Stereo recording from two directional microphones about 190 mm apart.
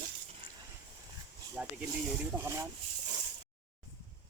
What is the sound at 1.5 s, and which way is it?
Speech, 5° right (ahead or behind).